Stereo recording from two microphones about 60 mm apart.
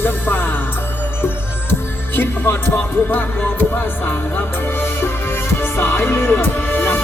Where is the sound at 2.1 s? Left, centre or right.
Left.